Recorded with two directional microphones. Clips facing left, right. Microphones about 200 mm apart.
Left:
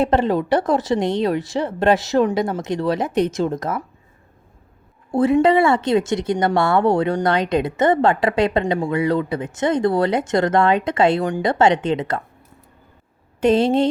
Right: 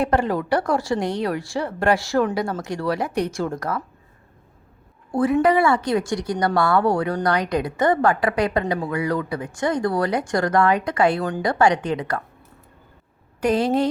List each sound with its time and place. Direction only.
0.0 s speech: 25° left (ahead or behind)
5.1 s speech: 25° left (ahead or behind)
13.4 s speech: 25° left (ahead or behind)